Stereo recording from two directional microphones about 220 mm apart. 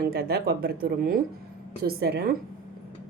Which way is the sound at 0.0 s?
45° right (ahead or behind).